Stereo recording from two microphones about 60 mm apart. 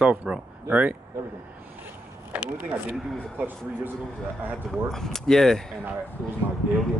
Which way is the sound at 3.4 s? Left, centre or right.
Right.